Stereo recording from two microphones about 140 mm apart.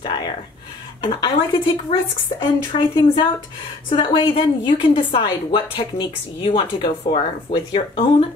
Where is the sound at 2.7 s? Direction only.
45° left (ahead or behind).